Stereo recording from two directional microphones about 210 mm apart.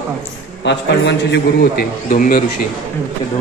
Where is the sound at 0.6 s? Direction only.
55° left (ahead or behind).